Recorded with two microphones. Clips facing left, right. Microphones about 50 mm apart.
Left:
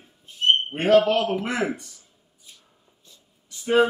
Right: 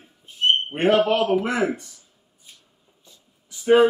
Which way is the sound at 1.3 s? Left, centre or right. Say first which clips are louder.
Right 4 dB; centre.